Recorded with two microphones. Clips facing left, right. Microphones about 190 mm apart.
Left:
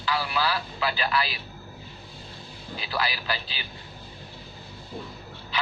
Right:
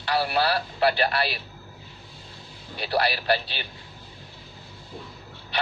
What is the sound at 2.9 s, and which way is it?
Speech, 60° right (ahead or behind).